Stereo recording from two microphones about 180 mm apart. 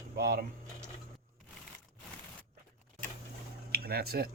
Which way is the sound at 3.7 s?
60° right (ahead or behind).